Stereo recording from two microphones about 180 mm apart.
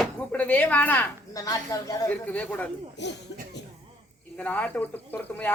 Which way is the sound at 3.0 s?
75° left (ahead or behind).